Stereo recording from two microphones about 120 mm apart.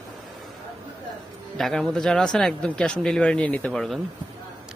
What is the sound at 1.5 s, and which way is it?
Speech, centre (ahead or behind).